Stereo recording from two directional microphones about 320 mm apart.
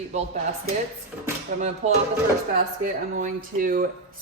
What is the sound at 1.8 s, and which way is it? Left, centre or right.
Speech, right.